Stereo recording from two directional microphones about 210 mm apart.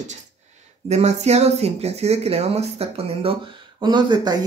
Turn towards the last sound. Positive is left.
turn(degrees=-20)  # may be behind; listen again after turning